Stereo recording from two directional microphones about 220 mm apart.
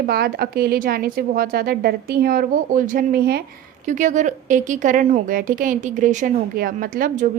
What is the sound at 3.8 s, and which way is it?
A woman's voice, 35° right (ahead or behind).